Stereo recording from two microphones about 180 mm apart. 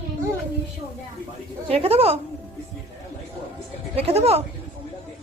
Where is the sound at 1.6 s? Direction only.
35° right (ahead or behind).